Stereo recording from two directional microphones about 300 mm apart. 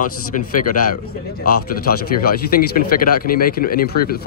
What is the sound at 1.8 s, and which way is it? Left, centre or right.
A man's voice, left.